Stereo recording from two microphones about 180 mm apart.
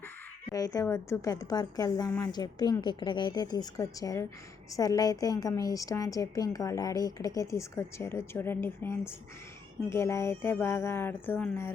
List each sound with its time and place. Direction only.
0.5 s a woman's voice: 20° left (ahead or behind)